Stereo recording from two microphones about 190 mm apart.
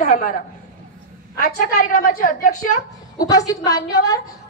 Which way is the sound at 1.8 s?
50° left (ahead or behind).